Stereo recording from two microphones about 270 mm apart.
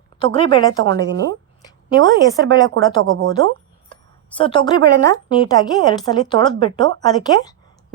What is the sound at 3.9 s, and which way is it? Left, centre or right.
A woman's voice, centre.